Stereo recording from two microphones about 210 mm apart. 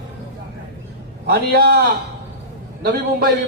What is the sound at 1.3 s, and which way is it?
Speech, 50° right (ahead or behind).